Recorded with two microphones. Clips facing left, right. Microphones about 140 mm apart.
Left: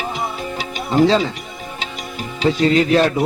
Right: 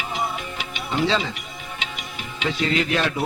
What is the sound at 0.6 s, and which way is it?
Music, 40° left (ahead or behind).